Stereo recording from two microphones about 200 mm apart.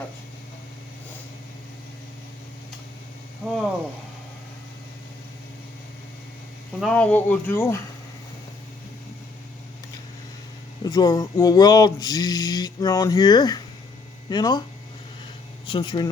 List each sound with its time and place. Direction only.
3.4 s speech: centre (ahead or behind)
6.7 s speech: 5° left (ahead or behind)
10.8 s speech: 20° left (ahead or behind)
15.6 s speech: 25° left (ahead or behind)